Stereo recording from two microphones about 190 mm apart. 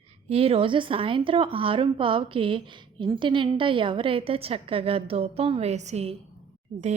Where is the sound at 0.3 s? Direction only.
30° right (ahead or behind).